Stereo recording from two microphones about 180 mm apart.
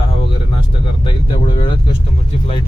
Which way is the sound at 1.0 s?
25° left (ahead or behind).